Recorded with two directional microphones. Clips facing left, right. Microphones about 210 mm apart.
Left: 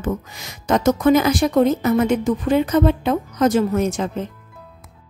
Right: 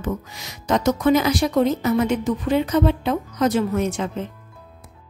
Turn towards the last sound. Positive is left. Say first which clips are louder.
# left 3 dB
turn(degrees=40)  # may be behind; listen again after turning